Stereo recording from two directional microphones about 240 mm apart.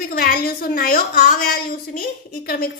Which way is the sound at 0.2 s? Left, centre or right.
Left.